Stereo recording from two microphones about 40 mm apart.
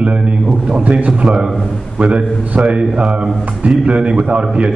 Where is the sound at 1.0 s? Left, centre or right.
Right.